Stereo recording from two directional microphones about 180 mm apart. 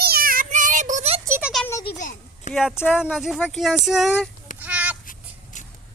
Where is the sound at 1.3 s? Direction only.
5° right (ahead or behind).